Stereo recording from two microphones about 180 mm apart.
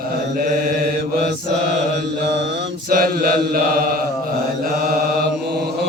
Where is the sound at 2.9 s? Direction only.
55° right (ahead or behind).